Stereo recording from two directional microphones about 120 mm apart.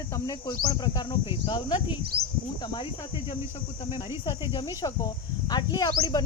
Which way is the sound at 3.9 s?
40° left (ahead or behind).